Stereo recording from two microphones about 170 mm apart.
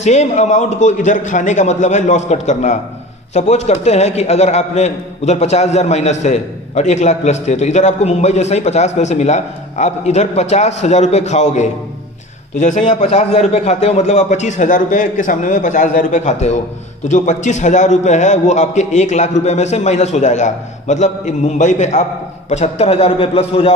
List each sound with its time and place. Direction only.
0.0 s a man's voice: 40° left (ahead or behind)